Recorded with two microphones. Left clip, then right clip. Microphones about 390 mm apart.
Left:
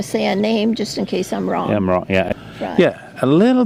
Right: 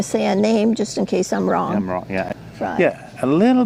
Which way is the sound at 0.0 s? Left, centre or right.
Right.